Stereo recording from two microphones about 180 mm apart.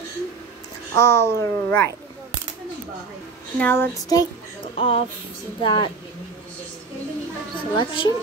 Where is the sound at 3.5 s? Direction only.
10° left (ahead or behind).